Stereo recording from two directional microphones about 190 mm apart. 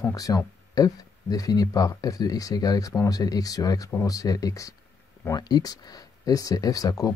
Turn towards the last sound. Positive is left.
turn(degrees=20)  # may be behind; listen again after turning